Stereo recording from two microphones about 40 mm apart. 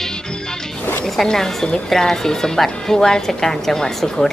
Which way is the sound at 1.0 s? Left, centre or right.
Centre.